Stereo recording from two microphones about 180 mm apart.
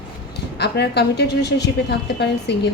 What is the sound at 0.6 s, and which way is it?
A woman's voice, 65° left (ahead or behind).